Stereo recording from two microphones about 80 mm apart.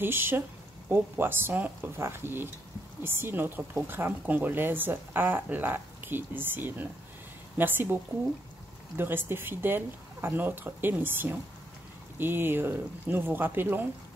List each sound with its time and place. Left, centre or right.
0.0 s speech: right